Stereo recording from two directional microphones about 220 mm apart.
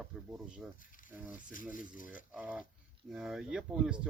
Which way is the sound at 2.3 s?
5° right (ahead or behind).